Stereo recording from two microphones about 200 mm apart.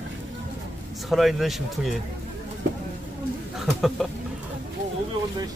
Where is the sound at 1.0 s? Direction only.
Centre (ahead or behind).